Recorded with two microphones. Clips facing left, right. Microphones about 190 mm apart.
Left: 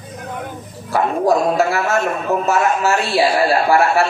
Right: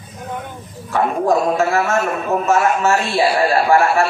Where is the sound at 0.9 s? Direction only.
35° left (ahead or behind).